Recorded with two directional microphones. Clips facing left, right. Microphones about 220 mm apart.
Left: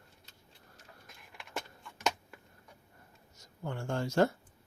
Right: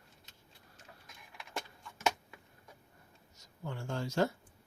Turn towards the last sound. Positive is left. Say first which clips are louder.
# left 4 dB
turn(degrees=50)  # may be behind; listen again after turning